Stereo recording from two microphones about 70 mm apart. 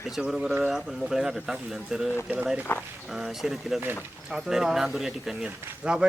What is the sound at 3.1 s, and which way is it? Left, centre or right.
Speech, centre.